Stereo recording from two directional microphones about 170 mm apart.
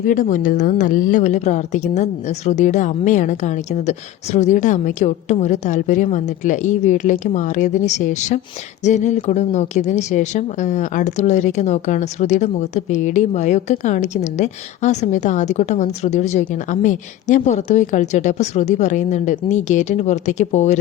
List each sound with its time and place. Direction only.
0.1 s a woman's voice: 50° left (ahead or behind)